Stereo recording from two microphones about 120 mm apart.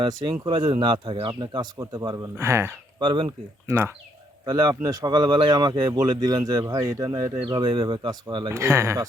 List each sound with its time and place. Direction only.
0.0 s speech: 35° right (ahead or behind)
3.0 s speech: 40° right (ahead or behind)
3.2 s speech: 20° right (ahead or behind)
4.4 s speech: 35° right (ahead or behind)
8.4 s speech: 20° right (ahead or behind)